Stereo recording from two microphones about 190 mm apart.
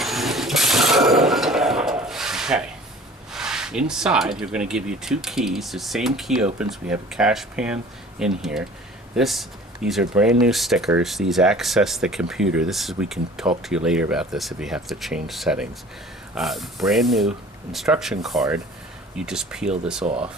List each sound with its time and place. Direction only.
0.0 s a sound: centre (ahead or behind)
3.3 s speech: 5° right (ahead or behind)
20.1 s speech: 30° right (ahead or behind)